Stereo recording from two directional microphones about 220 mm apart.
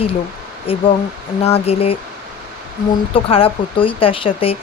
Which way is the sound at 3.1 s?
25° left (ahead or behind).